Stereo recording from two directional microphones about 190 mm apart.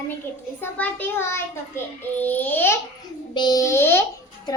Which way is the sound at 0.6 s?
10° left (ahead or behind).